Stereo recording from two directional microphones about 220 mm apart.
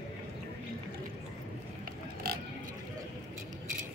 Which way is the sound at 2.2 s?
45° right (ahead or behind).